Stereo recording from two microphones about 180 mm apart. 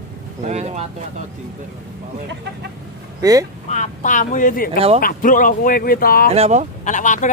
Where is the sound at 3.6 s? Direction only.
40° left (ahead or behind).